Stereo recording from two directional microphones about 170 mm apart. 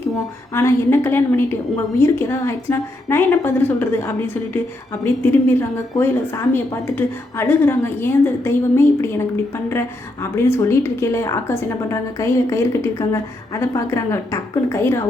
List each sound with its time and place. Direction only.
0.5 s a woman's voice: 15° left (ahead or behind)
10.3 s a woman's voice: 15° left (ahead or behind)